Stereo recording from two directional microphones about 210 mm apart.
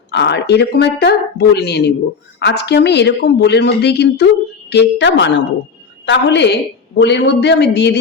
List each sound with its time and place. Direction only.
0.1 s a woman's voice: 55° left (ahead or behind)